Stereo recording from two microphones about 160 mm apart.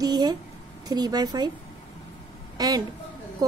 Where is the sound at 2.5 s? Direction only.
25° right (ahead or behind).